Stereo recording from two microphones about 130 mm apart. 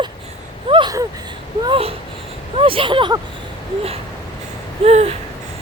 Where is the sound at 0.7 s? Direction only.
40° right (ahead or behind).